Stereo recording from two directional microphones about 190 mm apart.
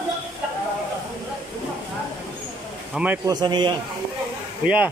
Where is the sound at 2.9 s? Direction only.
5° right (ahead or behind).